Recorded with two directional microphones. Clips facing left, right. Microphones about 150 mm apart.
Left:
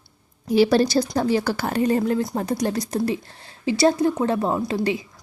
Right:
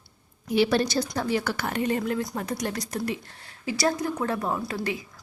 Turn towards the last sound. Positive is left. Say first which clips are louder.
# left 7 dB
turn(degrees=20)  # may be behind; listen again after turning